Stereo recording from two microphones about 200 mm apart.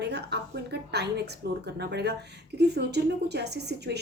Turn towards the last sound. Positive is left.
turn(degrees=-55)  # may be behind; listen again after turning